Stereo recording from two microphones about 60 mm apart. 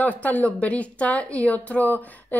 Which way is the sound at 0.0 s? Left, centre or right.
Left.